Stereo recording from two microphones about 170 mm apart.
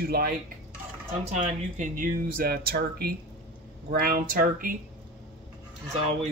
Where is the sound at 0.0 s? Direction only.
65° right (ahead or behind).